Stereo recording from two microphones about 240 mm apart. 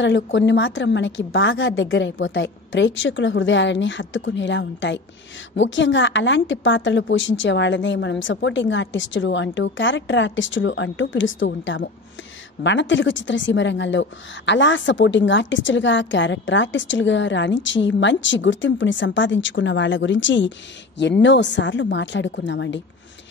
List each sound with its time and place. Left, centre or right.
0.0 s a woman's voice: left